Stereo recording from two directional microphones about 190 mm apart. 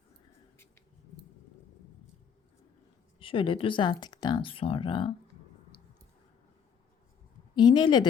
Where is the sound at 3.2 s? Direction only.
25° left (ahead or behind).